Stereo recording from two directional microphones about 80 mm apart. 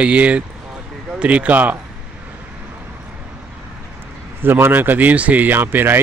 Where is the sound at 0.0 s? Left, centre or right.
Centre.